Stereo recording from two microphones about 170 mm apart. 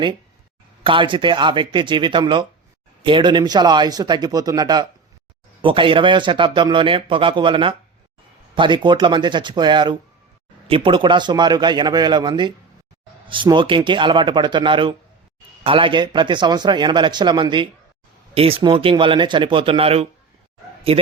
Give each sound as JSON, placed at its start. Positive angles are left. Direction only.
{"t": 0.9, "sound": "speech", "side_deg": -30}